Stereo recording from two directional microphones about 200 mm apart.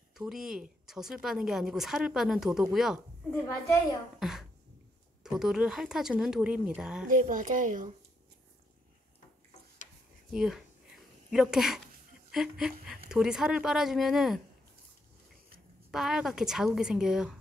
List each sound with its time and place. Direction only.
0.1 s speech: centre (ahead or behind)
4.2 s a sound: centre (ahead or behind)
5.2 s speech: centre (ahead or behind)
7.1 s speech: 40° right (ahead or behind)
10.3 s a sound: centre (ahead or behind)
12.3 s speech: centre (ahead or behind)
15.9 s speech: centre (ahead or behind)